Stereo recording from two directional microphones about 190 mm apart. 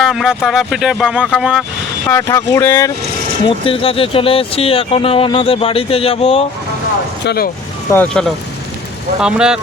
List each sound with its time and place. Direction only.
0.0 s speech: centre (ahead or behind)
2.0 s speech: 15° left (ahead or behind)
3.4 s speech: 30° left (ahead or behind)
7.3 s speech: 50° left (ahead or behind)
7.9 s speech: 10° left (ahead or behind)
9.2 s speech: 5° right (ahead or behind)